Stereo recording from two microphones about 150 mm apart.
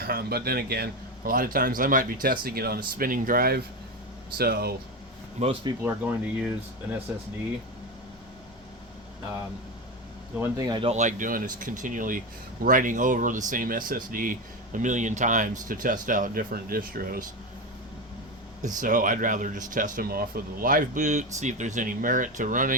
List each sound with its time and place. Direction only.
0.0 s speech: 90° right
5.4 s speech: 50° right (ahead or behind)
5.8 s speech: 10° right (ahead or behind)
10.6 s speech: 30° right (ahead or behind)
10.8 s speech: 50° right (ahead or behind); by 17.2 s 80° right
18.6 s speech: 60° right (ahead or behind)